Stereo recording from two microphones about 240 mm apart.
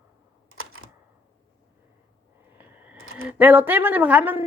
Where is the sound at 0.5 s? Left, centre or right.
Right.